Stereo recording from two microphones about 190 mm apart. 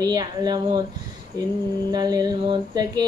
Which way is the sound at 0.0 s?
20° right (ahead or behind).